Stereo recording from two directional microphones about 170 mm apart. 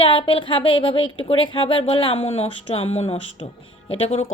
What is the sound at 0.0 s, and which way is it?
A woman's voice, 30° left (ahead or behind).